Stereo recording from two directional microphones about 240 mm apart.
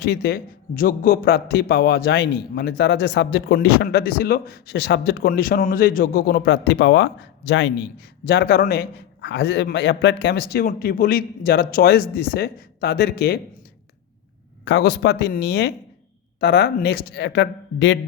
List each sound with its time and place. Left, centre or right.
0.0 s a man's voice: left
14.6 s speech: left